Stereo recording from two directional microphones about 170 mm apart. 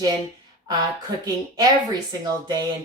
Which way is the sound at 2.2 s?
25° right (ahead or behind).